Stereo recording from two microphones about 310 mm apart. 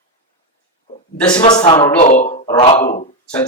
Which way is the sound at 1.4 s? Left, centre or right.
Centre.